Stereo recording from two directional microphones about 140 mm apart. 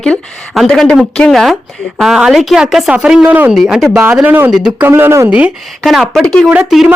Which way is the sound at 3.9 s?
15° right (ahead or behind).